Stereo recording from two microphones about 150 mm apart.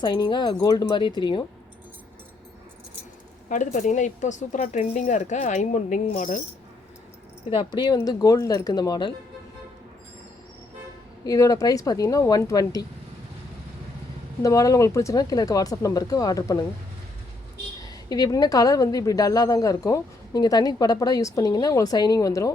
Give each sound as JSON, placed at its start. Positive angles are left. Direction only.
{"t": 0.0, "sound": "a woman's voice", "side_deg": 30}
{"t": 3.5, "sound": "speech", "side_deg": 55}
{"t": 7.5, "sound": "a woman's voice", "side_deg": 30}
{"t": 11.3, "sound": "a woman's voice", "side_deg": 20}
{"t": 14.4, "sound": "a woman's voice", "side_deg": 20}
{"t": 17.8, "sound": "a woman's voice", "side_deg": 25}